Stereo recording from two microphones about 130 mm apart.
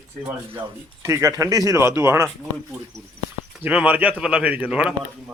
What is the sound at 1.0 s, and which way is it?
Speech, 20° right (ahead or behind).